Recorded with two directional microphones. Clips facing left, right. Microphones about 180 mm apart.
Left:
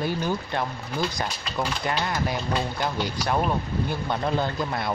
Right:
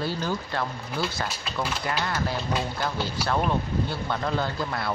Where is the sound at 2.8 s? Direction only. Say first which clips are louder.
Left 1 dB; 15° left (ahead or behind).